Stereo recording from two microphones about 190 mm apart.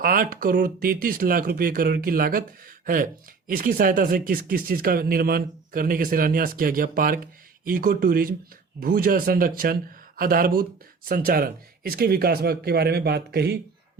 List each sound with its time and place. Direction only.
0.0 s speech: 50° right (ahead or behind)